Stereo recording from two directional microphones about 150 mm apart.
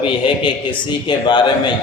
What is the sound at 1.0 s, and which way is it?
Speech, 30° left (ahead or behind).